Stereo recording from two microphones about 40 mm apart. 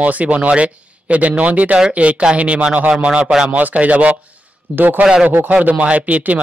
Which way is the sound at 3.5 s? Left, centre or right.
Right.